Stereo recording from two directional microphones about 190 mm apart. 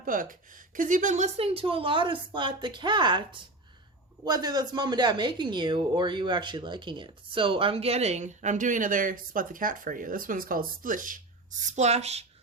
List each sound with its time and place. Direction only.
0.0 s a woman's voice: 45° right (ahead or behind)